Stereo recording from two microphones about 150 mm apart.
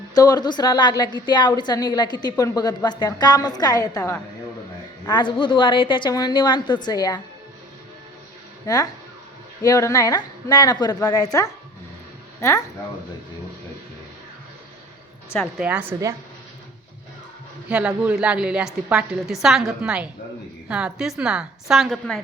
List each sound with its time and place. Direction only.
0.1 s a woman's voice: 25° left (ahead or behind)
8.6 s a woman's voice: 25° left (ahead or behind)
15.4 s a woman's voice: 5° right (ahead or behind)
17.7 s a woman's voice: 5° right (ahead or behind)